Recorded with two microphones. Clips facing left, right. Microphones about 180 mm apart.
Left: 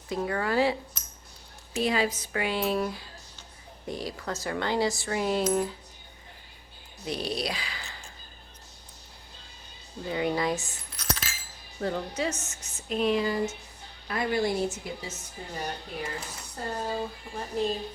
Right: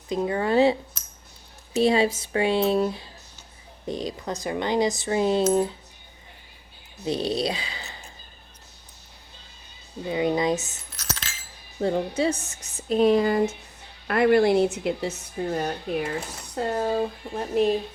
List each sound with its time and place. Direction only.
0.1 s speech: 20° right (ahead or behind)
1.8 s speech: 25° right (ahead or behind)
7.0 s speech: 25° right (ahead or behind)
10.1 s speech: 20° right (ahead or behind)
10.9 s music: 5° right (ahead or behind)
11.8 s a woman's voice: 25° right (ahead or behind)
13.2 s speech: 60° right (ahead or behind)